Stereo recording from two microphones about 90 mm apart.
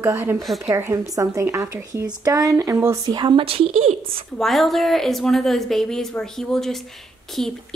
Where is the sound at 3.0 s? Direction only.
50° right (ahead or behind).